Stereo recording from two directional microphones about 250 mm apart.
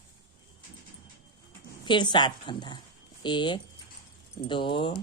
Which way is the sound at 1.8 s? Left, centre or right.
Centre.